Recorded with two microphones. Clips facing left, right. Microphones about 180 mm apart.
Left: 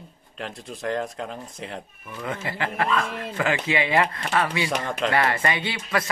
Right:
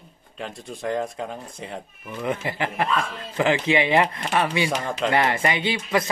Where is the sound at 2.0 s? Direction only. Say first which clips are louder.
Right 5 dB; 15° right (ahead or behind).